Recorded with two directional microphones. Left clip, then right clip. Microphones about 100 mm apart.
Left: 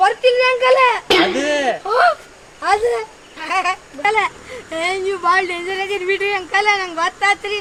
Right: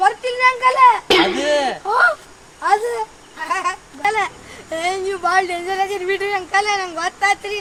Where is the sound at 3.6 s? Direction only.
40° right (ahead or behind).